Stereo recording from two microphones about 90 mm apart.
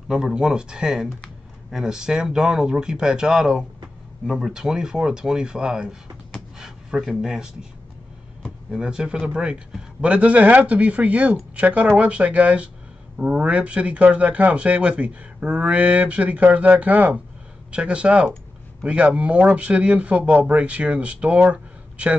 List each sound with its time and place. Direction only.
0.1 s speech: 10° right (ahead or behind)
8.6 s speech: 10° right (ahead or behind)